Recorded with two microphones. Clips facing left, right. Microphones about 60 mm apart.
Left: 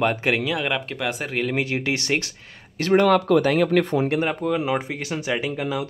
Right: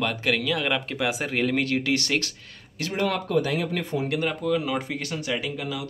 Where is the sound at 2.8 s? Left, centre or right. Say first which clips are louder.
Left 9 dB; left.